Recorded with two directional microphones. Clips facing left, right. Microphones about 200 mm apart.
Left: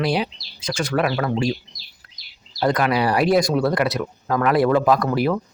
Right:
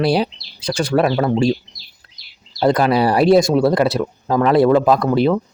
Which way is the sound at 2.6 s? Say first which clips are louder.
Right 5 dB; 30° right (ahead or behind).